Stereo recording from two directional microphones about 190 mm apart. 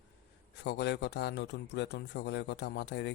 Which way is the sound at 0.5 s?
65° left (ahead or behind).